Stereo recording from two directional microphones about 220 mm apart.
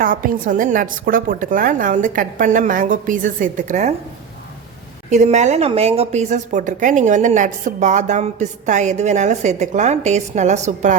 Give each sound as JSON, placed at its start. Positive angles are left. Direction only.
{"t": 0.0, "sound": "a woman's voice", "side_deg": -40}
{"t": 5.1, "sound": "a woman's voice", "side_deg": -30}